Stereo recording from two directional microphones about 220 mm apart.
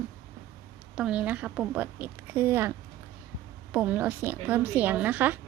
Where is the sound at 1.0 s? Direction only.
5° right (ahead or behind).